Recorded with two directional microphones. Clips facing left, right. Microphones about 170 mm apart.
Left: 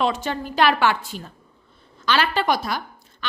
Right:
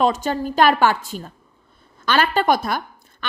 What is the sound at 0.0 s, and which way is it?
A woman's voice, 45° right (ahead or behind).